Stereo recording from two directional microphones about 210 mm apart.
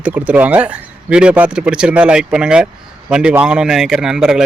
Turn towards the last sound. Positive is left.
turn(degrees=-5)  # may be behind; listen again after turning